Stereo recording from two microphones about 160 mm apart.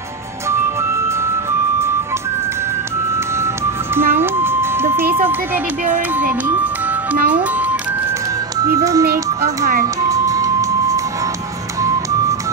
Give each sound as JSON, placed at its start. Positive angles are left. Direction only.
{"t": 3.9, "sound": "music", "side_deg": -15}
{"t": 6.1, "sound": "speech", "side_deg": -10}
{"t": 8.5, "sound": "speech", "side_deg": -20}
{"t": 10.0, "sound": "music", "side_deg": -20}